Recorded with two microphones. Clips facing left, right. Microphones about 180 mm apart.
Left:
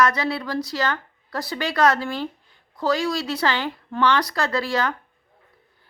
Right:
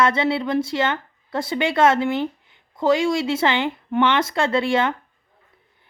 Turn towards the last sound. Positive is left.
turn(degrees=-25)  # may be behind; listen again after turning